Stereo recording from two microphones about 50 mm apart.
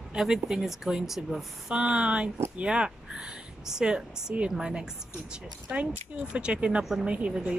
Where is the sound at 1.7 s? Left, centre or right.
Right.